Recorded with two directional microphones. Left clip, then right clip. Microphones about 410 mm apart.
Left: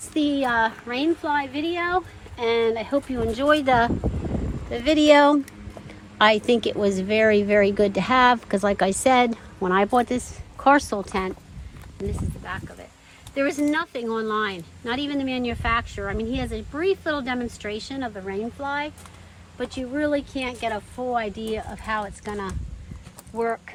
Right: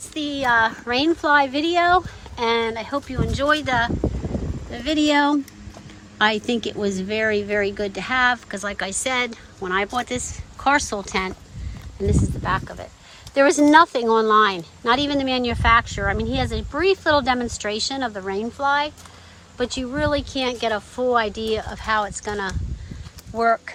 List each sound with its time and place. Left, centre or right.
0.1 s a woman's voice: centre
13.3 s speech: centre